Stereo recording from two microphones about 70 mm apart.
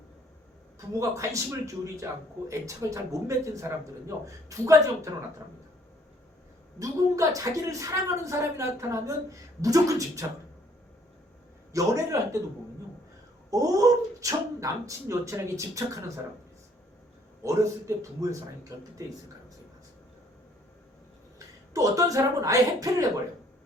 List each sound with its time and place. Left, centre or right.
0.9 s a man's voice: right
6.7 s a man's voice: right
11.7 s a man's voice: right
13.5 s a man's voice: right
17.4 s a man's voice: right
21.3 s speech: right